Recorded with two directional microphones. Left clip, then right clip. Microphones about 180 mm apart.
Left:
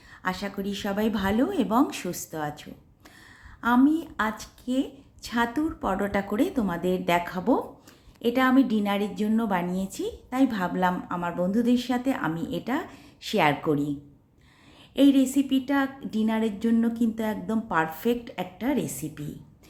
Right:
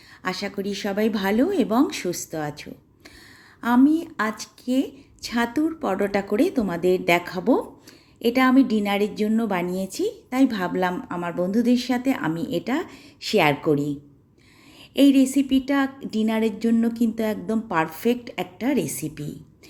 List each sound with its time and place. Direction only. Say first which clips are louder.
0.2 s a woman's voice: right 3 dB; 15° right (ahead or behind)
14.9 s a woman's voice: right 3 dB; 15° right (ahead or behind)